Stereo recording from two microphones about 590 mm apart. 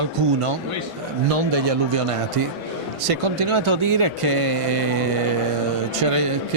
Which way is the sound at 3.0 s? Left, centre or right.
Right.